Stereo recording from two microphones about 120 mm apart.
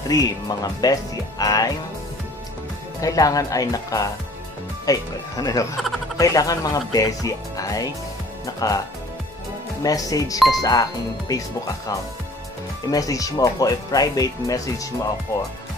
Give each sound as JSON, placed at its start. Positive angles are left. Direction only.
{"t": 0.1, "sound": "speech", "side_deg": 30}
{"t": 3.0, "sound": "speech", "side_deg": 30}
{"t": 9.8, "sound": "speech", "side_deg": 30}
{"t": 12.9, "sound": "speech", "side_deg": 30}